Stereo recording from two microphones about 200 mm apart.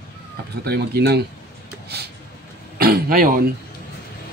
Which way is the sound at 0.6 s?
55° right (ahead or behind).